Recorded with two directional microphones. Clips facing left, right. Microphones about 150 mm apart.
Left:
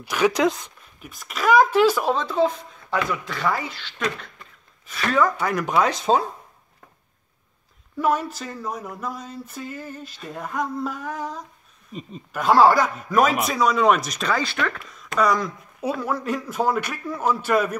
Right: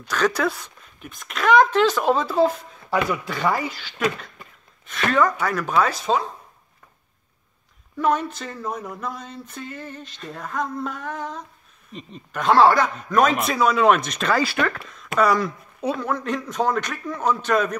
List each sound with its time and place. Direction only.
0.0 s a man's voice: 10° left (ahead or behind)
1.0 s speech: 5° left (ahead or behind)
2.1 s speech: 5° right (ahead or behind)
5.4 s a man's voice: 15° left (ahead or behind)
8.0 s speech: 5° left (ahead or behind)
15.8 s a man's voice: 5° left (ahead or behind)